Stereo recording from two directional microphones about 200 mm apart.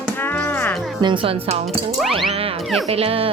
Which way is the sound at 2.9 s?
30° right (ahead or behind).